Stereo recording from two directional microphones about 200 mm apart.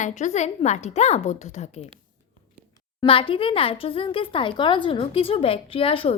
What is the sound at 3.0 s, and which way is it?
Speech, 25° left (ahead or behind).